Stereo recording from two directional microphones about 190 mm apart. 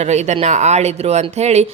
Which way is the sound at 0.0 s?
35° right (ahead or behind).